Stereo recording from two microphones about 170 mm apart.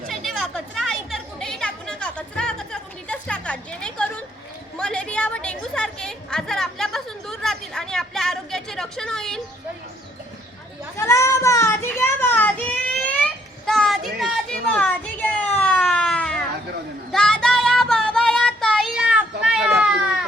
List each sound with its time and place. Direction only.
0.1 s chatter: centre (ahead or behind)
10.9 s a sound: 15° left (ahead or behind)
17.1 s child singing: 5° left (ahead or behind)